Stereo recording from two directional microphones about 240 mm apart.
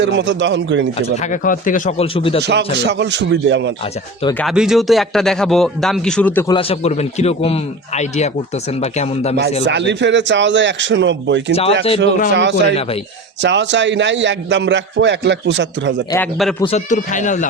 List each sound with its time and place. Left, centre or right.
0.0 s a man's voice: right
0.9 s a man's voice: left
2.4 s a man's voice: right
4.4 s speech: centre
6.5 s a man's voice: left
9.6 s a man's voice: right
16.1 s speech: centre
16.6 s speech: left